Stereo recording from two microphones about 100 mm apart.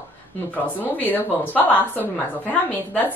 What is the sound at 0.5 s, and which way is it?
Speech, 15° left (ahead or behind).